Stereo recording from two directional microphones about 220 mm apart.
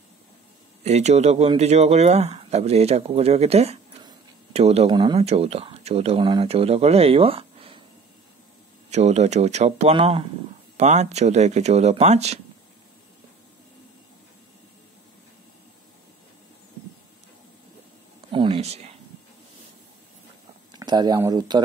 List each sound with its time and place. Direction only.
0.8 s speech: 30° right (ahead or behind)
8.9 s speech: 30° right (ahead or behind)
18.3 s a sound: 25° right (ahead or behind)
20.7 s speech: 20° right (ahead or behind)